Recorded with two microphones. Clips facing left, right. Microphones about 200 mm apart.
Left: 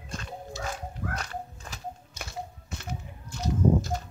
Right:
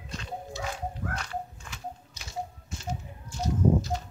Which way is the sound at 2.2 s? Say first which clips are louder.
Right 1 dB; 60° left (ahead or behind).